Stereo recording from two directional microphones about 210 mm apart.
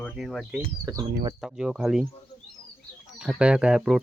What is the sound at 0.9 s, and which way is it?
Speech, 20° right (ahead or behind).